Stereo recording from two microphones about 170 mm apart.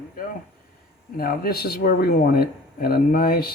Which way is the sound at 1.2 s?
60° left (ahead or behind).